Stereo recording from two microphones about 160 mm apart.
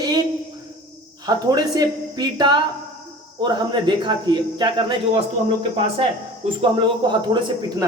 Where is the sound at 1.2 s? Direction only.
25° right (ahead or behind).